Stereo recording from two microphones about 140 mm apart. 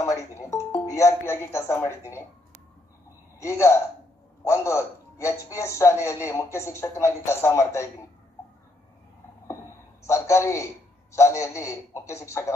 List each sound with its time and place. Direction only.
0.0 s music: 20° left (ahead or behind)
3.3 s a man's voice: 20° left (ahead or behind)
10.0 s a man's voice: 20° left (ahead or behind)